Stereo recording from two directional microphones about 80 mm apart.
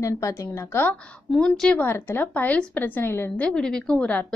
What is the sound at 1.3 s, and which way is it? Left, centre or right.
Speech, centre.